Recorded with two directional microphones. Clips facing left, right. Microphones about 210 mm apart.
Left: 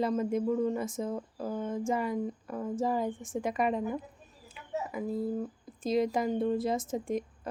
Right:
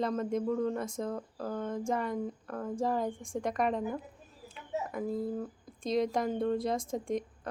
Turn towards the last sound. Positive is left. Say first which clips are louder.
# left 1 dB
turn(degrees=5)  # may be behind; listen again after turning